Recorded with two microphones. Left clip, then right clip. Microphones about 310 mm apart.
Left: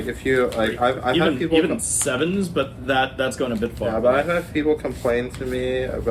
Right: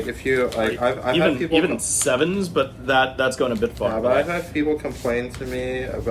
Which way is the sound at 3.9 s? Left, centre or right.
Centre.